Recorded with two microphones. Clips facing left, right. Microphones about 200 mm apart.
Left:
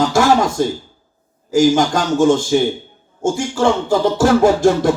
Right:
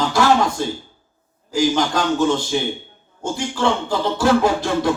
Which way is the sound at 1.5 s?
45° left (ahead or behind).